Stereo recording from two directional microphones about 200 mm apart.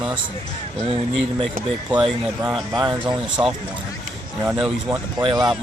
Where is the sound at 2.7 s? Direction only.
20° right (ahead or behind).